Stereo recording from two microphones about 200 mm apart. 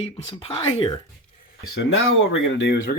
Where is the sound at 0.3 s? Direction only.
25° left (ahead or behind).